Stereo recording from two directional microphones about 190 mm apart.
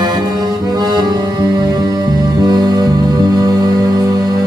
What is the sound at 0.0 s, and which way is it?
Music, 20° right (ahead or behind).